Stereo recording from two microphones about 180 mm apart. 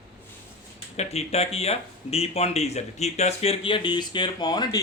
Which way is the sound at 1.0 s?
35° left (ahead or behind).